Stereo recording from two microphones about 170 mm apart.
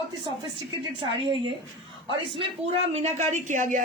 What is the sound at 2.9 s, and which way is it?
Speech, 40° right (ahead or behind).